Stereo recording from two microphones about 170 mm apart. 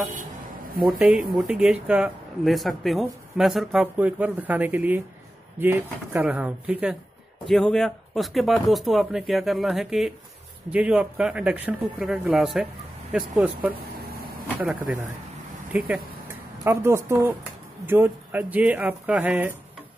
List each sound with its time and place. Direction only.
0.7 s speech: centre (ahead or behind)